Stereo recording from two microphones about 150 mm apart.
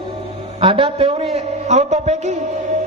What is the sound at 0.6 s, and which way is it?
A man's voice, 35° right (ahead or behind).